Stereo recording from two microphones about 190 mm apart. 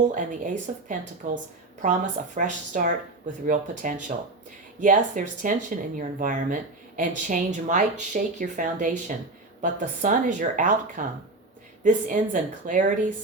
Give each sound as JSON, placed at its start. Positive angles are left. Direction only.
{"t": 0.1, "sound": "speech", "side_deg": -40}